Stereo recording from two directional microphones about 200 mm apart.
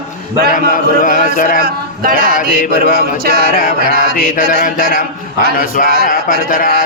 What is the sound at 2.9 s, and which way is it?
Speech, 50° right (ahead or behind).